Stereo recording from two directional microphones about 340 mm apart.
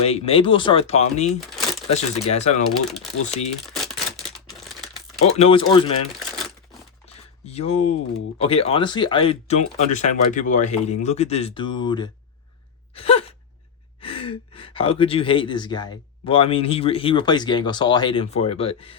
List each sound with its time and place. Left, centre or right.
0.0 s speech: centre
5.2 s speech: centre
7.0 s a sound: centre
8.4 s speech: centre
12.9 s gasp: centre
14.0 s speech: centre